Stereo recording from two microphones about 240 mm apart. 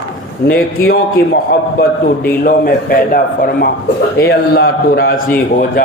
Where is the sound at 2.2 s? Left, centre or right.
Left.